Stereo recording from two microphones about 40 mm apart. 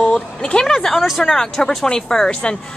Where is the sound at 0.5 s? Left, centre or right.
Centre.